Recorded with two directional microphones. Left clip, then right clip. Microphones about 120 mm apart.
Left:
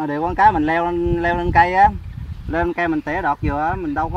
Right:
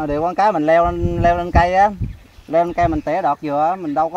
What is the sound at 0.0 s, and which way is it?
Speech, 45° right (ahead or behind).